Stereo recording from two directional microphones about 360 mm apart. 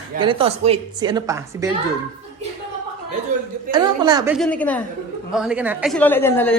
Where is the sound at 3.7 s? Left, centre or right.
Centre.